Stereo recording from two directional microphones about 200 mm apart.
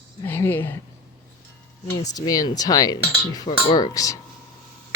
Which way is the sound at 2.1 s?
20° left (ahead or behind).